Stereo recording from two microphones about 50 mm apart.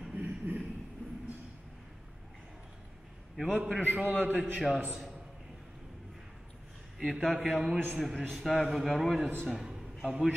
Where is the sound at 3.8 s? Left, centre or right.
Right.